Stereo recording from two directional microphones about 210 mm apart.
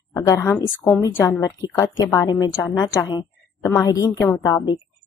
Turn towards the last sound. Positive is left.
turn(degrees=10)  # may be behind; listen again after turning